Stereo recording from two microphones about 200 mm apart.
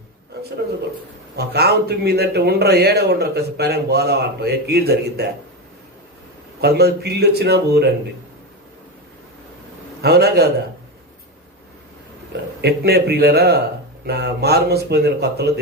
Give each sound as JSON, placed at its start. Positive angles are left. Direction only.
{"t": 1.4, "sound": "a man's voice", "side_deg": -55}
{"t": 6.6, "sound": "a man's voice", "side_deg": -55}
{"t": 10.0, "sound": "a man's voice", "side_deg": -55}
{"t": 12.6, "sound": "a man's voice", "side_deg": -55}